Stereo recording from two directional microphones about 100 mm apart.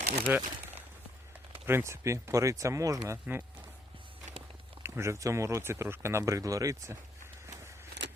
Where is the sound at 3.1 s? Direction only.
15° right (ahead or behind).